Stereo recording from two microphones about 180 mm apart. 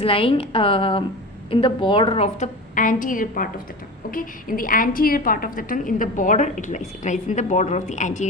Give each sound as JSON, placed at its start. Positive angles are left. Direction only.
{"t": 0.0, "sound": "a woman's voice", "side_deg": 30}
{"t": 2.7, "sound": "a woman's voice", "side_deg": 50}